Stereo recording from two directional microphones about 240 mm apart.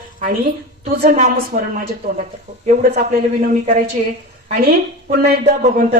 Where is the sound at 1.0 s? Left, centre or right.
Right.